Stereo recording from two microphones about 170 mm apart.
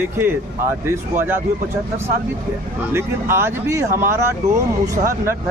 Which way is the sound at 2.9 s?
15° right (ahead or behind).